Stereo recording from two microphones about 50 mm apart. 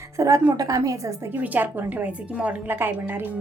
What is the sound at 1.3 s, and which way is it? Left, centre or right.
A woman's voice, right.